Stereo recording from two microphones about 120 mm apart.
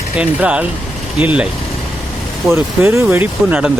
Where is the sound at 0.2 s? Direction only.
10° right (ahead or behind).